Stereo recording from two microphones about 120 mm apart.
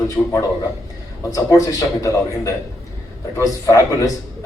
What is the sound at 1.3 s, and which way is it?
A man's voice, 25° left (ahead or behind).